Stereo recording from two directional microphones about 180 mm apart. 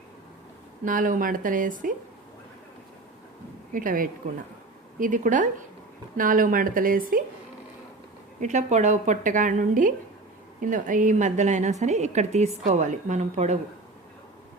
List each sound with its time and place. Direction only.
0.9 s a woman's voice: 50° right (ahead or behind)
3.8 s a woman's voice: 50° right (ahead or behind)
8.4 s a woman's voice: 40° right (ahead or behind)